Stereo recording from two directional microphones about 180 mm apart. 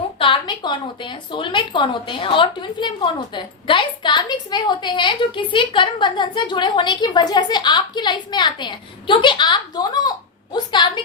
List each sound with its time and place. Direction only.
0.2 s a woman's voice: 25° left (ahead or behind)